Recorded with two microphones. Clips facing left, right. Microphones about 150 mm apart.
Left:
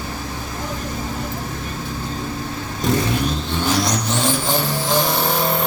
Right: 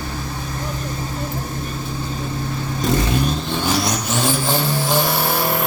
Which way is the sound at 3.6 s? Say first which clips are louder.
Left 1 dB; 10° right (ahead or behind).